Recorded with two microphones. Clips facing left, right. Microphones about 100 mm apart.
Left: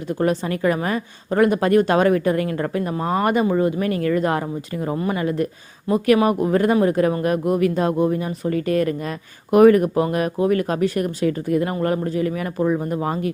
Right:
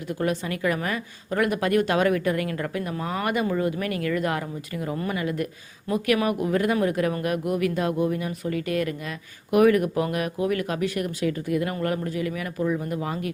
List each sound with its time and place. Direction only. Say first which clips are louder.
0.1 s speech: left 6 dB; 35° left (ahead or behind)